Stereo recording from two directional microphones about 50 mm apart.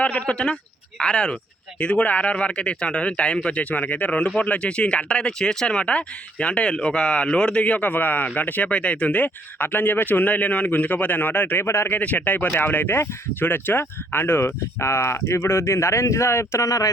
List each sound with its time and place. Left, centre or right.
0.0 s speech: left
8.7 s speech: left
11.6 s speech: left
11.9 s speech: left